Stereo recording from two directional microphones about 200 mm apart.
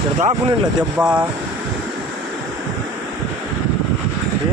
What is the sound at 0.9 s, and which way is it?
Speech, 10° right (ahead or behind).